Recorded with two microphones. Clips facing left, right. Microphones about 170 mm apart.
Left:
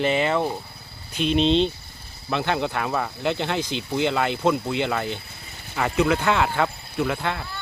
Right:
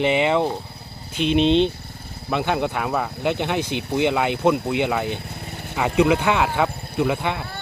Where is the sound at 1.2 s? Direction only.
65° right (ahead or behind).